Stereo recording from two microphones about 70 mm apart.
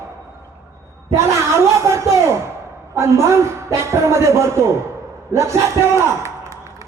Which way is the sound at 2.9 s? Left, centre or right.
Right.